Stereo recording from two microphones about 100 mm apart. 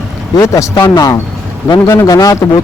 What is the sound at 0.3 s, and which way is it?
Speech, 35° left (ahead or behind).